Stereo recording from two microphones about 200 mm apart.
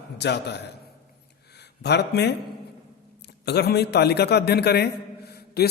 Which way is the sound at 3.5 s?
55° left (ahead or behind).